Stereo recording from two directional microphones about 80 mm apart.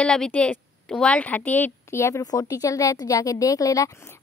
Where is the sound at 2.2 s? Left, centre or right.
Left.